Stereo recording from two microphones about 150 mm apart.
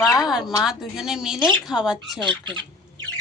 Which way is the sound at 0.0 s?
20° left (ahead or behind).